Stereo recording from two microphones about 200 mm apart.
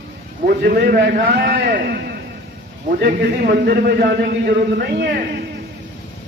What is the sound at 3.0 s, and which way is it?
A man's voice, 50° right (ahead or behind).